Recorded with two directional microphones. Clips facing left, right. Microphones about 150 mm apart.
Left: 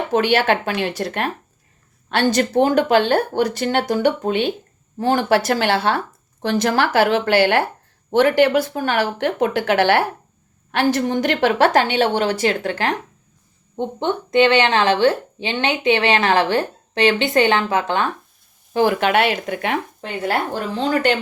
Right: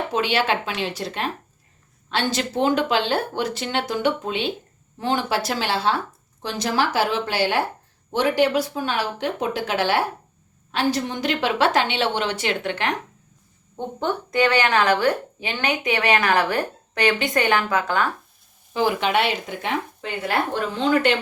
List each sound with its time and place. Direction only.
0.1 s speech: 55° left (ahead or behind); by 13.0 s 35° left (ahead or behind)
13.7 s a woman's voice: 25° left (ahead or behind)
18.7 s speech: 55° left (ahead or behind)